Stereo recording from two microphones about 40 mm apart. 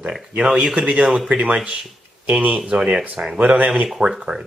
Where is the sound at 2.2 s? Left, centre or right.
Right.